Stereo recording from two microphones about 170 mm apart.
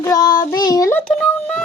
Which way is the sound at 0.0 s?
20° left (ahead or behind).